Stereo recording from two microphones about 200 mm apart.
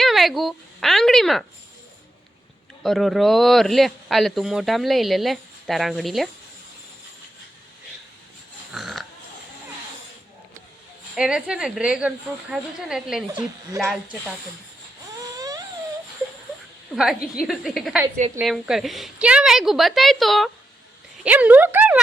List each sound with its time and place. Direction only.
0.0 s speech: centre (ahead or behind)
2.8 s speech: centre (ahead or behind)
8.7 s dog: centre (ahead or behind)
11.1 s speech: centre (ahead or behind)
15.4 s a sound: 15° right (ahead or behind)
16.9 s speech: centre (ahead or behind)